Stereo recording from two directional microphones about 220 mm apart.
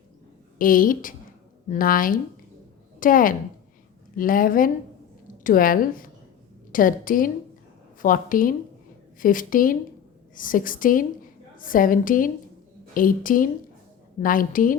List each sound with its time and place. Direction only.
0.6 s a woman's voice: 40° left (ahead or behind)